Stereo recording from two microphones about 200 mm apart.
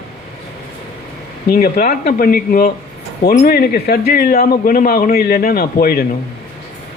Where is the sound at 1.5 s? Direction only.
50° left (ahead or behind).